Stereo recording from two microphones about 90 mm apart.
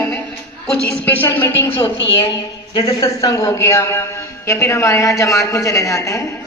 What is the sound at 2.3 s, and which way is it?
Speech, 55° left (ahead or behind).